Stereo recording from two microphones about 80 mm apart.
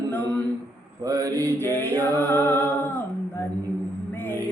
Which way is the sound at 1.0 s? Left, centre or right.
Right.